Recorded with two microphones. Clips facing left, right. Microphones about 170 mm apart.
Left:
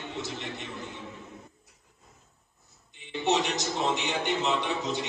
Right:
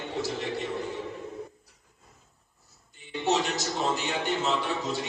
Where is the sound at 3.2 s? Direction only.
Centre (ahead or behind).